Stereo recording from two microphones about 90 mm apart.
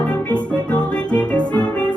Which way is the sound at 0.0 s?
10° left (ahead or behind).